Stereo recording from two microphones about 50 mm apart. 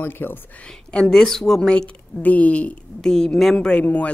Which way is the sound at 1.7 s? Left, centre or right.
Left.